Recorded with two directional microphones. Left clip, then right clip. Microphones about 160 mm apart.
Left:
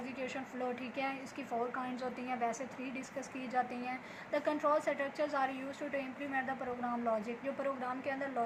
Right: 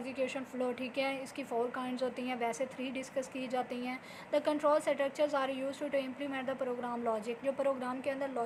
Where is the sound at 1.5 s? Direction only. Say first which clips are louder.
Right 2 dB; 35° right (ahead or behind).